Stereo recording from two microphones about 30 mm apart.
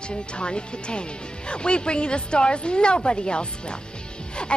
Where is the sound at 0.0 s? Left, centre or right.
Left.